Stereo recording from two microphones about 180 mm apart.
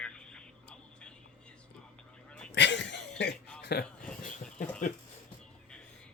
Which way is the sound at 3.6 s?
60° left (ahead or behind).